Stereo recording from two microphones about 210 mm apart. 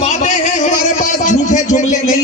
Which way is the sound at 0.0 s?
35° left (ahead or behind).